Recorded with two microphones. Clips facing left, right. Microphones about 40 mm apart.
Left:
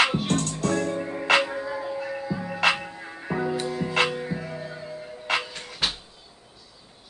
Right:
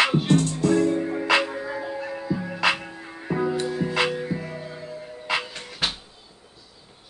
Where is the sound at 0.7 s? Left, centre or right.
Centre.